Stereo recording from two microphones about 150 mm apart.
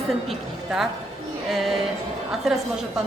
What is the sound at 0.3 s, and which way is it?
A woman's voice, centre (ahead or behind).